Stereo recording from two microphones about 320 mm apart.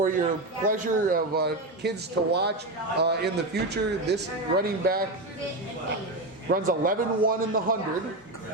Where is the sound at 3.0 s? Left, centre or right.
Right.